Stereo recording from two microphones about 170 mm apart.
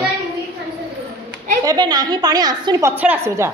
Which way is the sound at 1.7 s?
25° right (ahead or behind).